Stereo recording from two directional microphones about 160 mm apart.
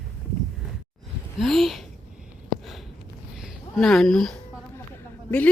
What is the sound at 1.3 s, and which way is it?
Speech, centre (ahead or behind).